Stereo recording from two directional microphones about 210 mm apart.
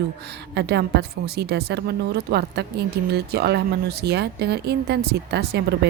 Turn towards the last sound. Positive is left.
turn(degrees=-50)  # may be behind; listen again after turning